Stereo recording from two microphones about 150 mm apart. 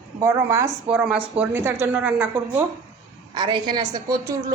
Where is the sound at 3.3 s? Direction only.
30° right (ahead or behind).